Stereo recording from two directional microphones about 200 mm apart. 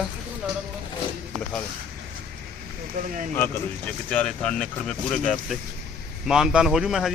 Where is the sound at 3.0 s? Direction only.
40° right (ahead or behind).